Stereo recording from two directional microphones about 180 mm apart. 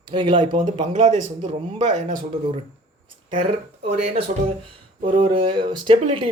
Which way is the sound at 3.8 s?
40° right (ahead or behind).